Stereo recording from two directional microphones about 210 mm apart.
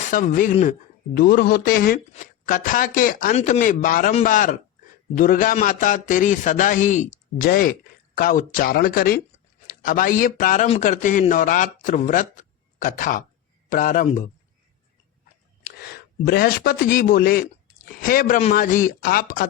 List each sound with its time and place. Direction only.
0.0 s speech: 40° left (ahead or behind)
15.6 s speech: 50° left (ahead or behind)